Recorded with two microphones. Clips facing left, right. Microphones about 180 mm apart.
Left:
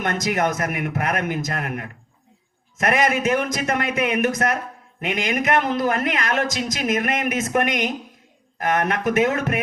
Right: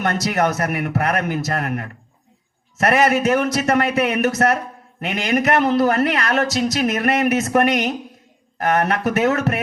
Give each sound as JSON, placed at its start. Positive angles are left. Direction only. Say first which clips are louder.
{"t": 0.0, "sound": "speech", "louder": "right 2 dB", "side_deg": -35}